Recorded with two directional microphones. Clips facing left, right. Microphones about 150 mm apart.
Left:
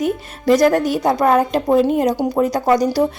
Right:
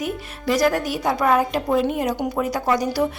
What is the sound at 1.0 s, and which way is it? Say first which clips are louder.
A woman's voice: left 2 dB; 40° left (ahead or behind).